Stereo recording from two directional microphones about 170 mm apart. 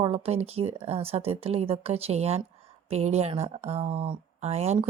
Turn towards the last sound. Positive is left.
turn(degrees=-40)  # may be behind; listen again after turning